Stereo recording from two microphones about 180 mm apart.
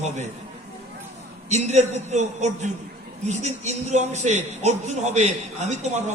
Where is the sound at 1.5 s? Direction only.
40° right (ahead or behind).